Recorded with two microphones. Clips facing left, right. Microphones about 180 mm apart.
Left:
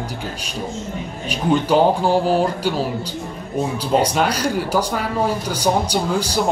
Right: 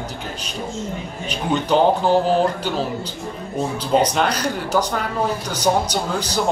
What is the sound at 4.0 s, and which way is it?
Speech, 10° left (ahead or behind).